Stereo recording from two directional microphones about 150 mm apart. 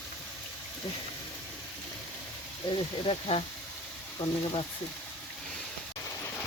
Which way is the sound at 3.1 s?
40° left (ahead or behind).